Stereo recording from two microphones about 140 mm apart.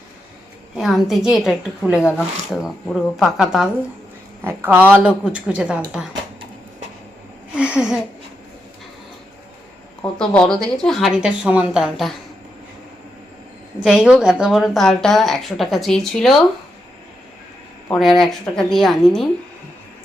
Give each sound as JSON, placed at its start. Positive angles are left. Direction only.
{"t": 0.8, "sound": "a woman's voice", "side_deg": 0}
{"t": 7.5, "sound": "a sound", "side_deg": -10}
{"t": 10.2, "sound": "speech", "side_deg": 5}
{"t": 13.8, "sound": "speech", "side_deg": -5}
{"t": 17.9, "sound": "speech", "side_deg": 0}